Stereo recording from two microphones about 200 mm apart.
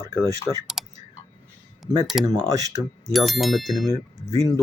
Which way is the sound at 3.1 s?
Centre (ahead or behind).